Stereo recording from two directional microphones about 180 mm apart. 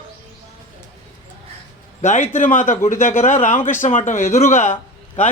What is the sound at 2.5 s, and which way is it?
Speech, 45° left (ahead or behind).